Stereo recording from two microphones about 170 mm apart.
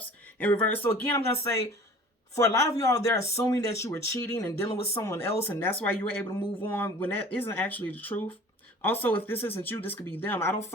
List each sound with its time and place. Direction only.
0.3 s speech: 10° left (ahead or behind)